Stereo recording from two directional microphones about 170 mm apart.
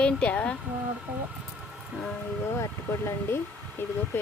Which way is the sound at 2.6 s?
15° left (ahead or behind).